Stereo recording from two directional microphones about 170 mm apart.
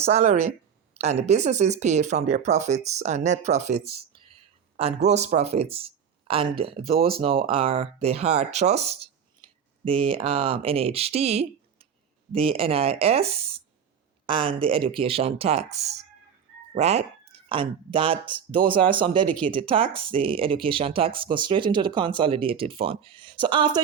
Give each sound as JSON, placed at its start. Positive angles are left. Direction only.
{"t": 0.0, "sound": "speech", "side_deg": -40}